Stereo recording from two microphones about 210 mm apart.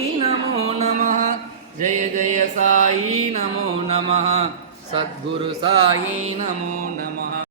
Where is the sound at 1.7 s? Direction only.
35° right (ahead or behind).